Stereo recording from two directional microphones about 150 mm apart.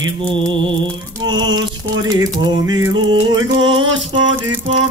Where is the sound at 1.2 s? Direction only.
30° right (ahead or behind).